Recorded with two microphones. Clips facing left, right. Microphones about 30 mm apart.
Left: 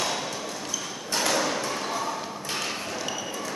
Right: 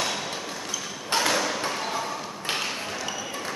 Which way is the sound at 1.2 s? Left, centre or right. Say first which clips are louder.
Left 2 dB; centre.